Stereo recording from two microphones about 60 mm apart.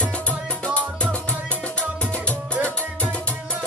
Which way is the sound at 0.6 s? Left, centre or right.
Left.